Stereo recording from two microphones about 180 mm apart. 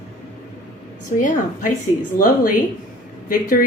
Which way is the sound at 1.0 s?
45° left (ahead or behind).